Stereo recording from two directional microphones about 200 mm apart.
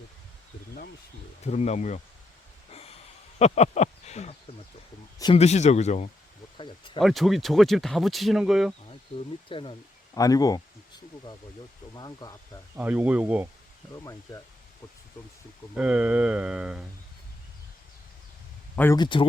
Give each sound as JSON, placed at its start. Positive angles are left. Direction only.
{"t": 1.5, "sound": "speech", "side_deg": 35}
{"t": 3.3, "sound": "speech", "side_deg": 35}
{"t": 6.6, "sound": "speech", "side_deg": 25}
{"t": 7.0, "sound": "speech", "side_deg": 0}
{"t": 9.5, "sound": "speech", "side_deg": 25}
{"t": 11.9, "sound": "speech", "side_deg": 20}
{"t": 12.7, "sound": "speech", "side_deg": -10}
{"t": 13.9, "sound": "speech", "side_deg": 15}
{"t": 15.7, "sound": "speech", "side_deg": -5}
{"t": 18.9, "sound": "speech", "side_deg": 25}